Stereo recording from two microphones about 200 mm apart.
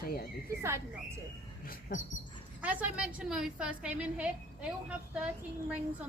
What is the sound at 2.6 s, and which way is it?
A woman's voice, 5° right (ahead or behind).